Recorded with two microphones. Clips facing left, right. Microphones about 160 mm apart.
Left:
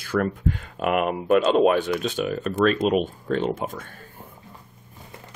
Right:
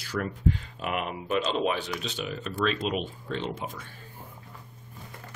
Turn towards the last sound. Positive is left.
turn(degrees=50)  # may be behind; listen again after turning